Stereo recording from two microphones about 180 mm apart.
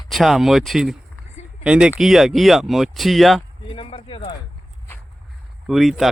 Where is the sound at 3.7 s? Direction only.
30° left (ahead or behind).